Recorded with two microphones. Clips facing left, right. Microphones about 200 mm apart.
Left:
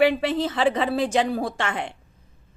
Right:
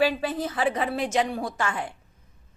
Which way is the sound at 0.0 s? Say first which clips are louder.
Left 4 dB; 80° left.